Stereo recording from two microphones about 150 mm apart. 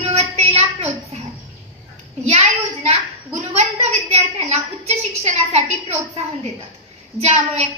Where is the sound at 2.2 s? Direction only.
45° right (ahead or behind).